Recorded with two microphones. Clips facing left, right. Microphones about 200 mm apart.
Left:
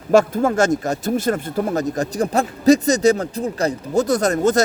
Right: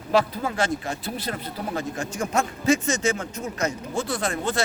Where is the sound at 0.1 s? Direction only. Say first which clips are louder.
Left 8 dB; 45° left (ahead or behind).